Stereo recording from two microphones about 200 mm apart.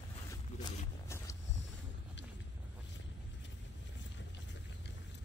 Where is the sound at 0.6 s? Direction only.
15° left (ahead or behind).